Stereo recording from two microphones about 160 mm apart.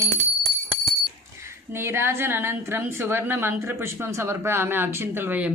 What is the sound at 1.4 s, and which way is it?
A woman's voice, 15° right (ahead or behind).